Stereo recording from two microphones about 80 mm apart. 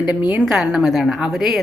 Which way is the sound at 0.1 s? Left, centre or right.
Centre.